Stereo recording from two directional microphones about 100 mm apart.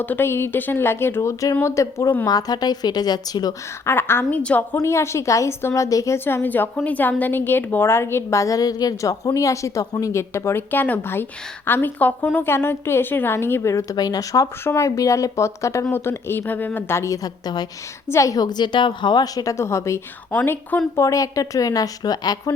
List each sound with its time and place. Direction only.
0.0 s a woman's voice: 20° left (ahead or behind); by 3.5 s 40° left (ahead or behind)
3.8 s a woman's voice: 25° left (ahead or behind)
4.8 s a woman's voice: 30° left (ahead or behind)
6.1 s a woman's voice: 20° left (ahead or behind)
13.9 s a woman's voice: 40° left (ahead or behind)
14.6 s a woman's voice: 25° left (ahead or behind)
21.0 s a woman's voice: 35° left (ahead or behind)